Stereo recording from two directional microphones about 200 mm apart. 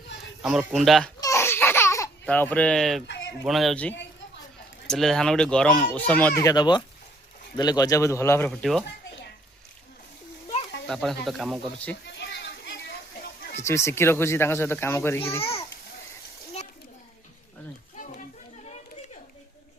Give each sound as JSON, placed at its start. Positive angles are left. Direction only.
{"t": 0.4, "sound": "speech", "side_deg": 0}
{"t": 1.2, "sound": "a sound", "side_deg": 15}
{"t": 3.4, "sound": "speech", "side_deg": 0}
{"t": 8.4, "sound": "speech", "side_deg": 0}
{"t": 10.8, "sound": "speech", "side_deg": 0}
{"t": 12.1, "sound": "children playing", "side_deg": 60}
{"t": 13.2, "sound": "a sound", "side_deg": 50}
{"t": 13.7, "sound": "speech", "side_deg": 15}
{"t": 17.9, "sound": "a sound", "side_deg": 40}